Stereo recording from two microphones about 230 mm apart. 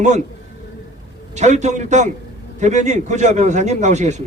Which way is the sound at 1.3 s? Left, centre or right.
Right.